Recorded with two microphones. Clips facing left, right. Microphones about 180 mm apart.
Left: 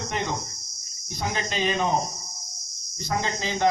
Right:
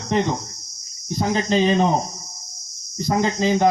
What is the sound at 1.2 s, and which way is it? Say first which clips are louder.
Speech: right 9 dB; 30° right (ahead or behind).